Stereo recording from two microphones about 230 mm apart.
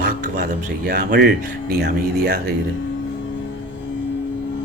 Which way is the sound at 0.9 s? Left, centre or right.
Right.